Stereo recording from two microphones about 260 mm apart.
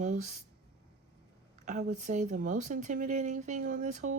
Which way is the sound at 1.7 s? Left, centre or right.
Right.